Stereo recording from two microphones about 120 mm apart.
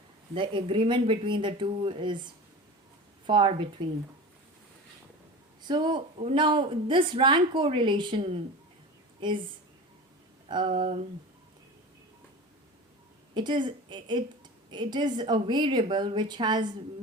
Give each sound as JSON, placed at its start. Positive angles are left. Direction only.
{"t": 0.3, "sound": "a woman's voice", "side_deg": -45}
{"t": 3.2, "sound": "a woman's voice", "side_deg": -45}
{"t": 5.6, "sound": "a woman's voice", "side_deg": -40}
{"t": 6.1, "sound": "speech", "side_deg": -55}
{"t": 6.4, "sound": "a woman's voice", "side_deg": -45}
{"t": 10.5, "sound": "a woman's voice", "side_deg": -40}
{"t": 13.3, "sound": "a woman's voice", "side_deg": -40}